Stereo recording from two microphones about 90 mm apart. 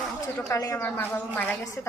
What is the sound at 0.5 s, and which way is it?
Speech, 35° left (ahead or behind).